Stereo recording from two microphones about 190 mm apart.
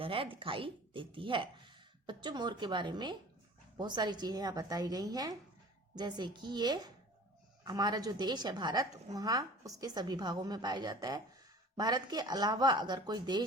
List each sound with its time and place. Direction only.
0.0 s a woman's voice: 30° right (ahead or behind)